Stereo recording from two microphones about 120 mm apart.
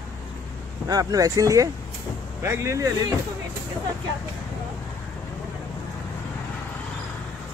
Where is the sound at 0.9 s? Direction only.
30° right (ahead or behind).